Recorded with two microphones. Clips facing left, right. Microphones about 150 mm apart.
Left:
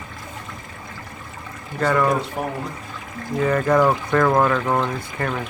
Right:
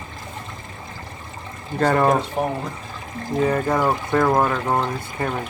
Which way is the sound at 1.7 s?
35° right (ahead or behind).